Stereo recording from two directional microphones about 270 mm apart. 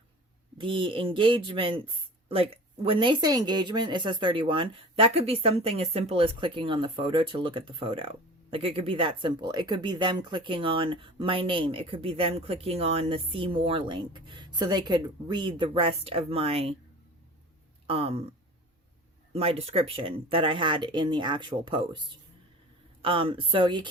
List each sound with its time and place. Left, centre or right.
0.6 s speech: centre
17.8 s speech: right
19.3 s speech: right